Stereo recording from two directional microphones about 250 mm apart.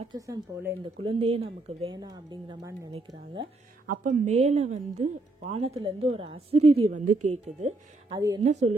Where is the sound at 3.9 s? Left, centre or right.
Right; by 8.4 s centre.